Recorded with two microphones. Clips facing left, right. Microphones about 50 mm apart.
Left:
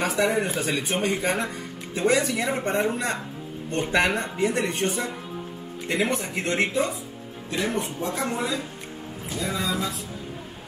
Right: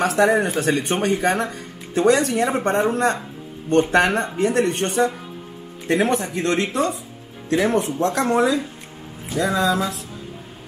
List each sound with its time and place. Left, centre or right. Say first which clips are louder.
0.0 s speech: right 6 dB; right